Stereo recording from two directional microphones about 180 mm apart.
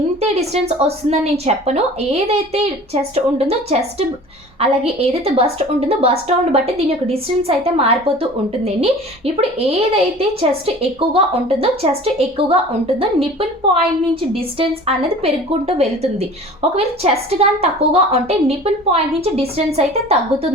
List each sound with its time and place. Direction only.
0.2 s a woman's voice: 35° right (ahead or behind)